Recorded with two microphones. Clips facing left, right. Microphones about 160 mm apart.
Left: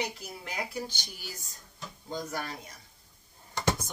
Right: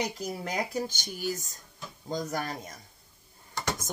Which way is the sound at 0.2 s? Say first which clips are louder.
Right 6 dB; 40° right (ahead or behind).